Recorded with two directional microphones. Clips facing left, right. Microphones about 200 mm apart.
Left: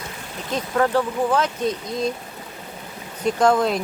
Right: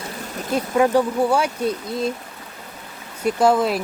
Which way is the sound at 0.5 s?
10° right (ahead or behind).